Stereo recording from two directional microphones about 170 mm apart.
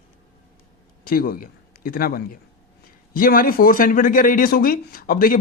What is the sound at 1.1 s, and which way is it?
Speech, 60° left (ahead or behind).